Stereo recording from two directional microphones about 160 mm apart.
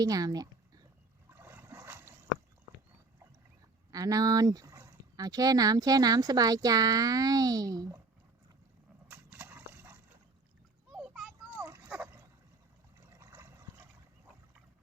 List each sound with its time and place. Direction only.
0.0 s speech: 25° right (ahead or behind)
1.3 s boat: 15° right (ahead or behind)
3.9 s speech: 20° right (ahead or behind)
9.0 s horse: 10° right (ahead or behind)
10.9 s a sound: 5° right (ahead or behind)
11.5 s a sound: 15° right (ahead or behind)
13.0 s water: 15° right (ahead or behind)